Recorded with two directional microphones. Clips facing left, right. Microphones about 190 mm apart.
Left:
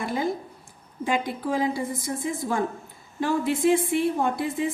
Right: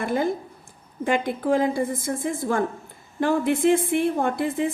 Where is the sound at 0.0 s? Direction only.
55° right (ahead or behind).